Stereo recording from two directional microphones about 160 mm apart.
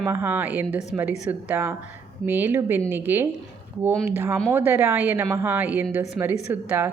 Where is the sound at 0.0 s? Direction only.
15° right (ahead or behind).